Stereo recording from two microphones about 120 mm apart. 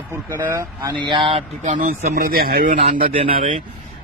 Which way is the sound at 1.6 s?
90° right.